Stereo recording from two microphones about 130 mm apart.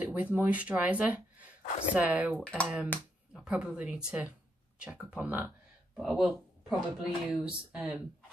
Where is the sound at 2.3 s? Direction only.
10° left (ahead or behind).